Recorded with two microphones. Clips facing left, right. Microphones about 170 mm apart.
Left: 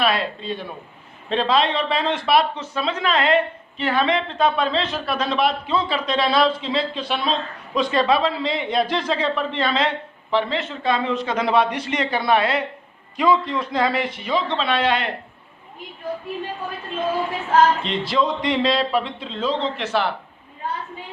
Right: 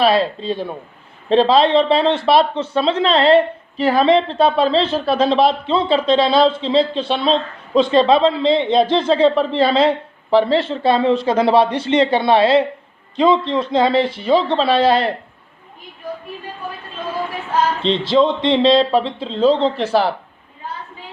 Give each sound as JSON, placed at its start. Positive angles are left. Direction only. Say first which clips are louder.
{"t": 0.0, "sound": "speech", "louder": "right 7 dB", "side_deg": -30}
{"t": 17.8, "sound": "speech", "louder": "right 7 dB", "side_deg": -25}